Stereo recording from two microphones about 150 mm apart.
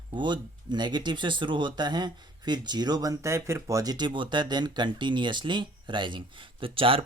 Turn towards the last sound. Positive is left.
turn(degrees=-35)  # may be behind; listen again after turning